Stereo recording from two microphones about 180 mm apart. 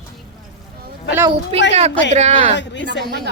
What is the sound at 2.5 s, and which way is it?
Speech, 85° left.